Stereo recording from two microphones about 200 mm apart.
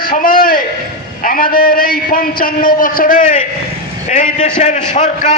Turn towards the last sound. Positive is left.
turn(degrees=35)  # may be behind; listen again after turning